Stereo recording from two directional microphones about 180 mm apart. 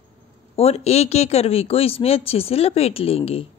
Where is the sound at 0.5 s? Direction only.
35° left (ahead or behind).